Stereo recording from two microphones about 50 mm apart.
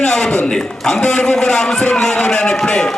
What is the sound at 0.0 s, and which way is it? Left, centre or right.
A man's voice, centre.